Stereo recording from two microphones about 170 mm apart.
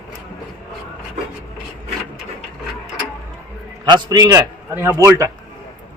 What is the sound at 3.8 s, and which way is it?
A man's voice, 25° right (ahead or behind).